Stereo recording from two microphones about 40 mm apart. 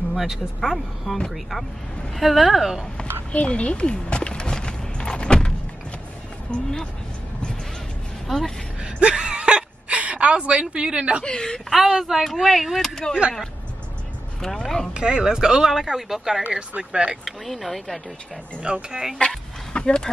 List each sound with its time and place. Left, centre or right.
0.1 s speech: centre
3.3 s a sound: left
6.5 s speech: left
8.3 s speech: centre
8.8 s whimper: right
11.7 s speech: centre
12.8 s speech: centre
14.4 s a sound: centre
15.0 s speech: right
16.9 s speech: right
17.2 s speech: centre
18.6 s speech: centre
19.1 s a sound: left